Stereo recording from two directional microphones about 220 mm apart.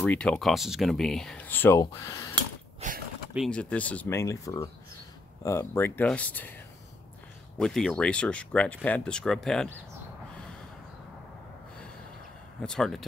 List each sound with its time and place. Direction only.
0.0 s speech: 5° left (ahead or behind)
2.8 s speech: 30° right (ahead or behind)
3.3 s speech: 5° left (ahead or behind)
7.5 s speech: centre (ahead or behind)
12.6 s speech: centre (ahead or behind)